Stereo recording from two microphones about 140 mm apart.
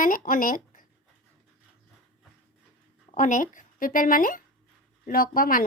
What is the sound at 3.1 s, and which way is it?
Speech, 65° left (ahead or behind).